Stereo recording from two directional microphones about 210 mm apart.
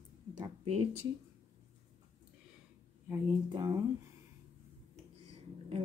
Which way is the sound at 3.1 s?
15° right (ahead or behind).